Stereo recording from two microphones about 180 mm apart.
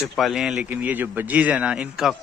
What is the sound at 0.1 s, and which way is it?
Speech, centre (ahead or behind).